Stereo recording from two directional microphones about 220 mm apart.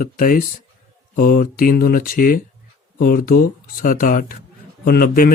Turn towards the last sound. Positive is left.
turn(degrees=45)  # may be behind; listen again after turning